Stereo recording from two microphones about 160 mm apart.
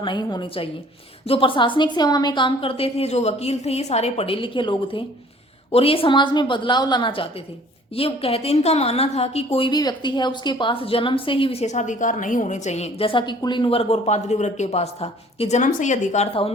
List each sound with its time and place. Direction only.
0.0 s a woman's voice: 30° left (ahead or behind)